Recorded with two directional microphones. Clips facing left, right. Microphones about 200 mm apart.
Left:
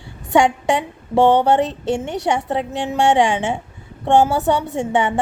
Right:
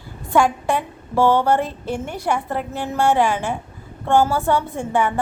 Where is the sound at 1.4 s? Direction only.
75° left (ahead or behind).